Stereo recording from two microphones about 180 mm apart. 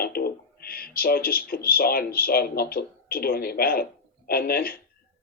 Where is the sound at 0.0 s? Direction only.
55° left (ahead or behind).